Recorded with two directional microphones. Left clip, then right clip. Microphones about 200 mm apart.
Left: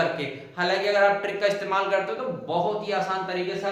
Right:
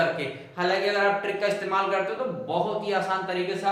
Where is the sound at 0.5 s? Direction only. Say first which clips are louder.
Left 2 dB; 20° left (ahead or behind).